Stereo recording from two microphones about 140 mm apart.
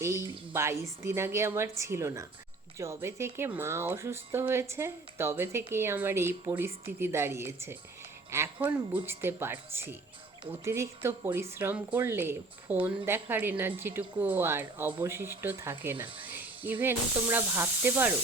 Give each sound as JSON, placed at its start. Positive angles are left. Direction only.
{"t": 0.0, "sound": "a woman's voice", "side_deg": -20}